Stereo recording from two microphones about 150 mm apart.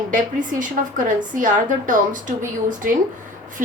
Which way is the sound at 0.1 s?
60° right (ahead or behind).